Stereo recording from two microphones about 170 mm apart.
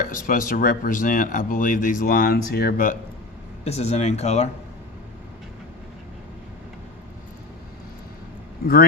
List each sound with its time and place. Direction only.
0.0 s speech: 55° left (ahead or behind)
3.6 s speech: 40° left (ahead or behind)
8.6 s speech: 60° left (ahead or behind)